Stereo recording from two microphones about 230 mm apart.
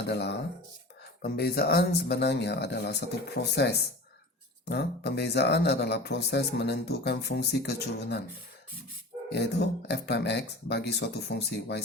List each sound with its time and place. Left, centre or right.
0.1 s speech: left
9.3 s speech: left